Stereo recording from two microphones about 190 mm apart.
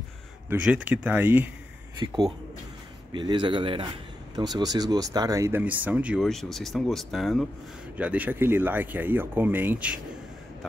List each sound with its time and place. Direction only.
0.5 s speech: 5° right (ahead or behind)
2.0 s speech: 25° right (ahead or behind); by 9.9 s 10° right (ahead or behind)